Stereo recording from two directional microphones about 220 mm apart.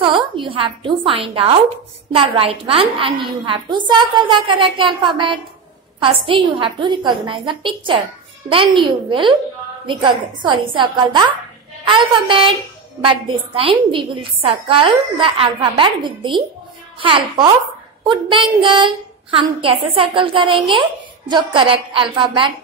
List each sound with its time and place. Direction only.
0.0 s a woman's voice: 25° right (ahead or behind)